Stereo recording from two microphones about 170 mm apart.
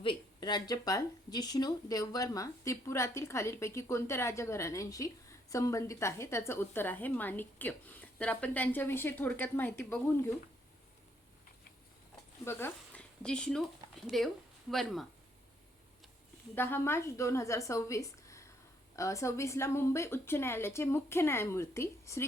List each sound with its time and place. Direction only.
0.0 s speech: 30° left (ahead or behind); by 10.2 s 15° left (ahead or behind)
12.5 s speech: 10° left (ahead or behind)
16.6 s speech: 15° left (ahead or behind)